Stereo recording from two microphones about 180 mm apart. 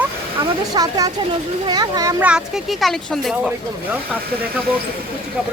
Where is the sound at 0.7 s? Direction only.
20° right (ahead or behind).